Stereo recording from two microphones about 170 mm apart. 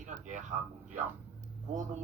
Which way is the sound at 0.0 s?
45° right (ahead or behind).